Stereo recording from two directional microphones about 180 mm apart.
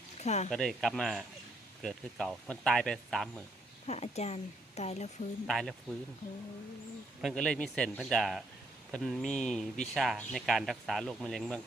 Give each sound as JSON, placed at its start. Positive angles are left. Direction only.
{"t": 0.2, "sound": "speech", "side_deg": 40}
{"t": 0.5, "sound": "speech", "side_deg": 0}
{"t": 3.8, "sound": "speech", "side_deg": 35}
{"t": 5.5, "sound": "speech", "side_deg": 0}
{"t": 7.2, "sound": "speech", "side_deg": 0}